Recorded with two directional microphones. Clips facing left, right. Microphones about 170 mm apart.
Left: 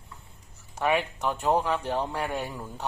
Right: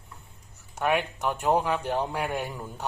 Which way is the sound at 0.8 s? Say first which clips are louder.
Even; centre (ahead or behind).